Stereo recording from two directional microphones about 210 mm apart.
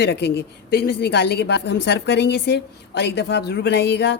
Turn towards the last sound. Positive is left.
turn(degrees=50)  # may be behind; listen again after turning